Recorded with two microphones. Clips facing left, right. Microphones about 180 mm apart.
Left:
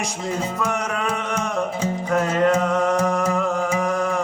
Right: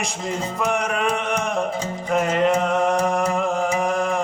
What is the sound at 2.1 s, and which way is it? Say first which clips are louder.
Music: even; 25° right (ahead or behind).